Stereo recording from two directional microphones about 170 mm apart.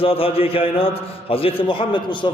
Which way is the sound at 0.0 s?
35° left (ahead or behind).